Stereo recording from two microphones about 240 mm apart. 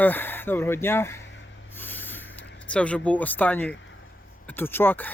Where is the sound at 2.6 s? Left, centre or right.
Centre.